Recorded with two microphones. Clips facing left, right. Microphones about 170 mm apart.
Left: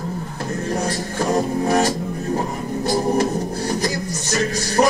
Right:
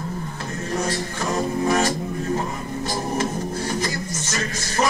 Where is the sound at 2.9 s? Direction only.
35° left (ahead or behind).